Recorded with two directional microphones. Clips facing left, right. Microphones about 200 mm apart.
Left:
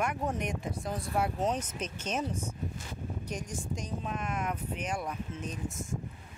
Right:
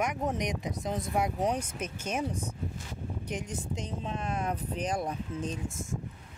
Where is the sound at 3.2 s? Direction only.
20° right (ahead or behind).